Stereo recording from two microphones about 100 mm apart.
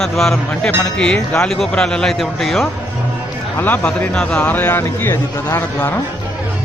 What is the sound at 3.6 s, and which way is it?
A man's voice, 20° left (ahead or behind).